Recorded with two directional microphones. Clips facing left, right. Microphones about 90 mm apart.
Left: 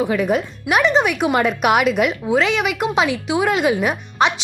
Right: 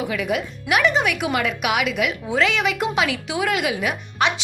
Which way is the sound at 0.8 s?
25° left (ahead or behind).